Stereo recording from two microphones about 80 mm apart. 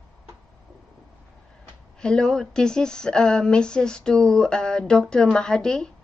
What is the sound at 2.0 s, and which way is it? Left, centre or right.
A woman's voice, centre.